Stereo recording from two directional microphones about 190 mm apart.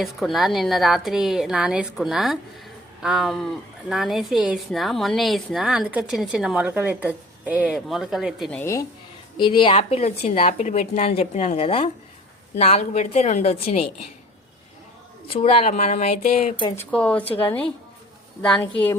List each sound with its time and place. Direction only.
0.0 s a woman's voice: centre (ahead or behind)
8.6 s speech: 15° left (ahead or behind)
9.4 s a woman's voice: 25° left (ahead or behind)
15.3 s a woman's voice: 30° left (ahead or behind)
16.7 s speech: 5° left (ahead or behind)
18.4 s speech: 5° left (ahead or behind)